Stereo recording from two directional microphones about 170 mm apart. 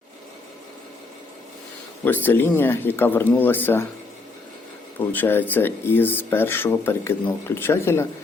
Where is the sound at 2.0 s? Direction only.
10° left (ahead or behind).